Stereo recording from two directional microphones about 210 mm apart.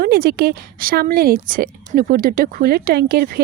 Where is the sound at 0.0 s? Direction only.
45° right (ahead or behind).